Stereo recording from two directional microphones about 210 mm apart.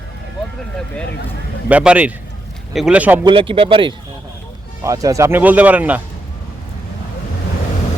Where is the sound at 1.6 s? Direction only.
5° right (ahead or behind).